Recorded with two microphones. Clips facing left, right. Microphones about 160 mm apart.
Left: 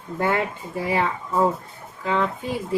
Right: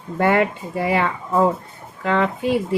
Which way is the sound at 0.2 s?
70° right (ahead or behind).